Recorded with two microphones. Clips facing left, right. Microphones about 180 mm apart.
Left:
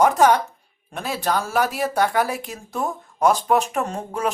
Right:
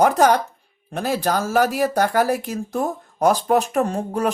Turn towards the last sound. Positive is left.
turn(degrees=-40)  # may be behind; listen again after turning